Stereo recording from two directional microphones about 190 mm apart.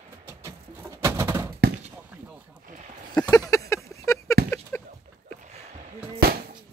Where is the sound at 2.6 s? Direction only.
40° right (ahead or behind).